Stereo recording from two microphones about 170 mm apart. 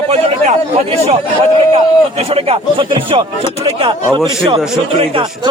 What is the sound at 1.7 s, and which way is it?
Speech, 35° right (ahead or behind).